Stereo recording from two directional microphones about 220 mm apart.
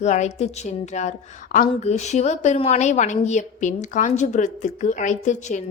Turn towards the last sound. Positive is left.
turn(degrees=35)  # may be behind; listen again after turning